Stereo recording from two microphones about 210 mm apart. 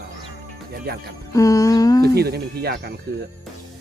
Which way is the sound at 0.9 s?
50° right (ahead or behind).